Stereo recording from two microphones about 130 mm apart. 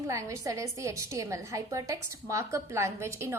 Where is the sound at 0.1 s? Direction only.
25° right (ahead or behind).